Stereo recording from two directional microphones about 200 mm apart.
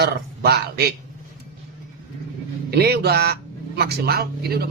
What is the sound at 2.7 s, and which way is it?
A man's voice, 55° right (ahead or behind).